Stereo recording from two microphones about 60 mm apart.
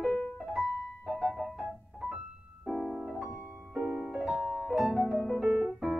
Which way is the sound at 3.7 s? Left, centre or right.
Centre.